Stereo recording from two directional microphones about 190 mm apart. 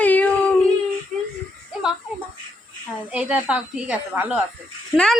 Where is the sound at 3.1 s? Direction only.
5° right (ahead or behind).